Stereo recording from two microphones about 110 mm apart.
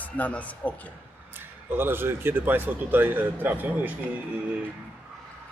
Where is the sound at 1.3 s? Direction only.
20° right (ahead or behind).